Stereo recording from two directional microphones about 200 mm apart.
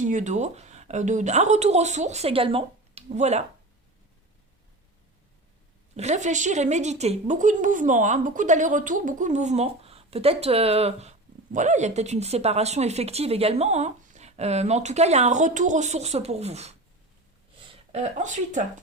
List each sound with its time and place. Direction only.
0.0 s a woman's voice: 40° right (ahead or behind)
6.0 s a woman's voice: 35° right (ahead or behind)